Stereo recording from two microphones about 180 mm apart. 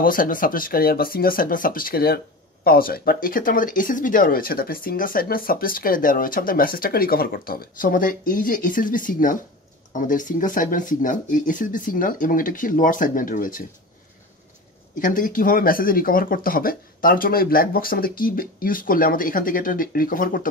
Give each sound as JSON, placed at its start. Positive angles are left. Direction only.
{"t": 0.0, "sound": "speech", "side_deg": 50}
{"t": 15.0, "sound": "speech", "side_deg": 50}